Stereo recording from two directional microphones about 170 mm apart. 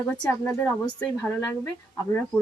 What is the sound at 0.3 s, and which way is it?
Speech, 10° left (ahead or behind).